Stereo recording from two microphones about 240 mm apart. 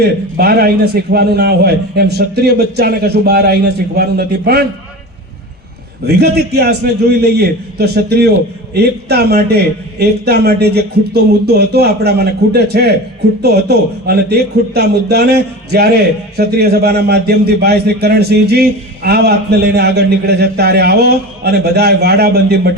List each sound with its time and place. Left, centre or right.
0.0 s a man's voice: right
6.1 s a man's voice: right